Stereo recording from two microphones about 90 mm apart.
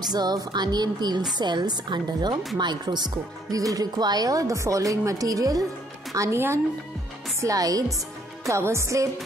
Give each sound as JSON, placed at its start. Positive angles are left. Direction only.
{"t": 0.0, "sound": "speech", "side_deg": -50}
{"t": 3.5, "sound": "a woman's voice", "side_deg": -40}